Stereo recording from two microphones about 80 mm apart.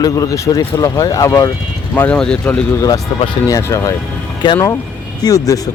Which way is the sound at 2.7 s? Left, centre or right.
Left.